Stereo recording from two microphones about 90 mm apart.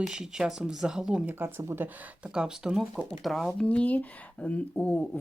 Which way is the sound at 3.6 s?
15° left (ahead or behind).